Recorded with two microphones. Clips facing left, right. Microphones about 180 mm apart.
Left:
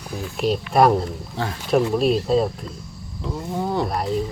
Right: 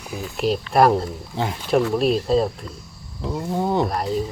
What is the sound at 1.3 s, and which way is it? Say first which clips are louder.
Speech: right 3 dB; 15° right (ahead or behind).